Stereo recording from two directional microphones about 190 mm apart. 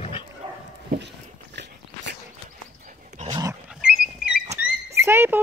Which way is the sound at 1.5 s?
65° right (ahead or behind).